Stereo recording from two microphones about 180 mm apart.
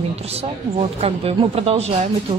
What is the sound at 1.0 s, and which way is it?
Speech, 30° right (ahead or behind).